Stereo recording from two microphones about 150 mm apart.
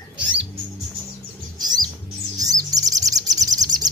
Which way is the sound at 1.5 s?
25° right (ahead or behind).